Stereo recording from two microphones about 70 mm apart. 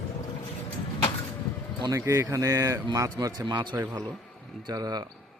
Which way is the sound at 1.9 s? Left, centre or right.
Right.